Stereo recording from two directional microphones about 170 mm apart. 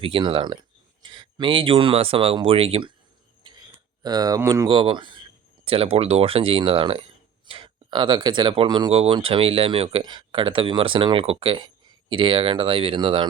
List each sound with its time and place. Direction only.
0.0 s speech: 30° right (ahead or behind)
3.4 s a sound: 30° right (ahead or behind)
4.0 s speech: 20° right (ahead or behind)
8.9 s speech: 35° right (ahead or behind)